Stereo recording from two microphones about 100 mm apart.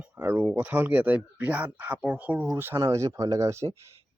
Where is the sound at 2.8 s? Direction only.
30° right (ahead or behind).